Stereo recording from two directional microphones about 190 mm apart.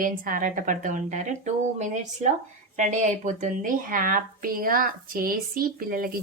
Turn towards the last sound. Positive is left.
turn(degrees=-50)  # may be behind; listen again after turning